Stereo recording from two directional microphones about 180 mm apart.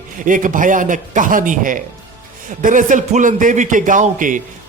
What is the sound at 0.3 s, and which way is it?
A man's voice, 45° right (ahead or behind).